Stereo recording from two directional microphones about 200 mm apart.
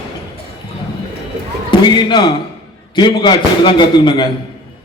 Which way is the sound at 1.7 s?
25° left (ahead or behind).